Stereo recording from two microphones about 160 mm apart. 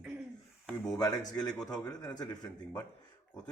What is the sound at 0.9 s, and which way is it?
A man's voice, 25° left (ahead or behind).